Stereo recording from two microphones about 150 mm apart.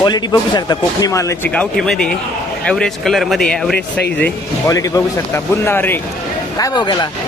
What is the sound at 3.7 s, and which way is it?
Speech, 90° left.